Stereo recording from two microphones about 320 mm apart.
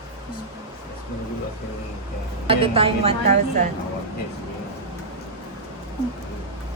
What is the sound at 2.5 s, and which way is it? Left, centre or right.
A woman's voice, centre.